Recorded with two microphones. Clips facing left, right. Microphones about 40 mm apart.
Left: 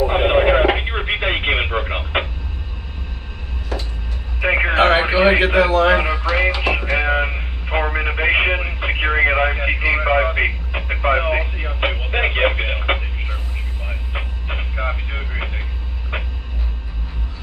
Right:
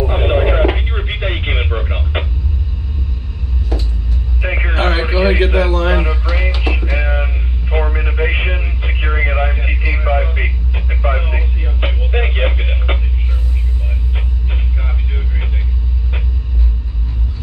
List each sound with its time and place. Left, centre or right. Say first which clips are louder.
0.0 s radio: left 1 dB; left
4.4 s radio: left 4 dB; left
5.9 s a sound: left 2 dB; left
6.6 s radio: left 2 dB; left